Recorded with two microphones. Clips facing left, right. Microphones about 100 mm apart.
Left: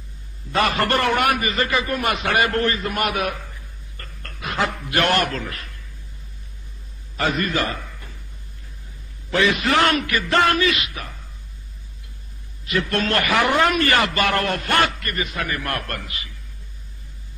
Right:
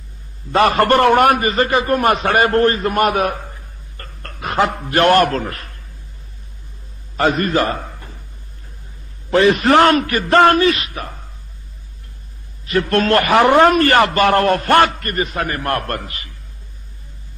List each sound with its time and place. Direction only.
0.5 s a man's voice: 40° right (ahead or behind)
7.2 s a man's voice: 40° right (ahead or behind)
9.3 s a man's voice: 40° right (ahead or behind)
12.6 s a man's voice: 45° right (ahead or behind)